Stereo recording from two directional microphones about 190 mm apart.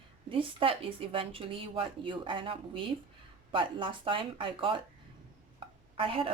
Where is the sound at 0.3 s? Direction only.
30° right (ahead or behind).